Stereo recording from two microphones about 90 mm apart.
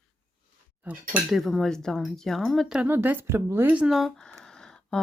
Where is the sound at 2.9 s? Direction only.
25° right (ahead or behind).